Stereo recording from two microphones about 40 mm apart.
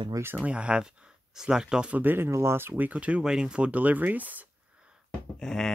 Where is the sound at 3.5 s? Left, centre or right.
Right.